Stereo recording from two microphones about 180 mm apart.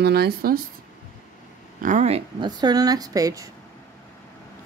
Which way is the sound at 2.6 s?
20° right (ahead or behind).